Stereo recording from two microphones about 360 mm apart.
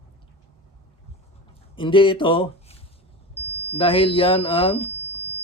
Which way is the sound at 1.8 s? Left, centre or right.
Centre.